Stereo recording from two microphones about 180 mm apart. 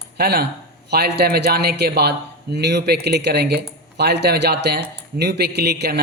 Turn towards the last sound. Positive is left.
turn(degrees=-65)  # may be behind; listen again after turning